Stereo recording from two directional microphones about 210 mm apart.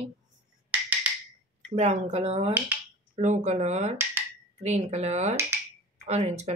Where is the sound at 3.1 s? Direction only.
35° right (ahead or behind).